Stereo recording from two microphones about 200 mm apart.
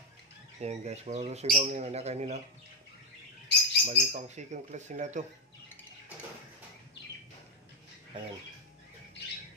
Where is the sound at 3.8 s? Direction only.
35° right (ahead or behind).